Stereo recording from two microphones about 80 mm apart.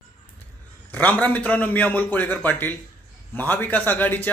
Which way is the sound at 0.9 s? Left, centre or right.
Left.